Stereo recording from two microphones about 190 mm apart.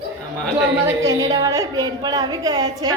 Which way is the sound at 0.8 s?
15° right (ahead or behind).